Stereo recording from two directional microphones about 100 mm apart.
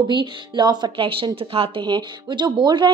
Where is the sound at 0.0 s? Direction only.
50° right (ahead or behind).